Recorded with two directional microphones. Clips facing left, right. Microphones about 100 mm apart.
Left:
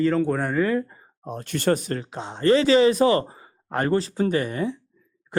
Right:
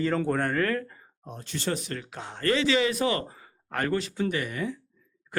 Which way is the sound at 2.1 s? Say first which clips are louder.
Left 8 dB; 25° left (ahead or behind).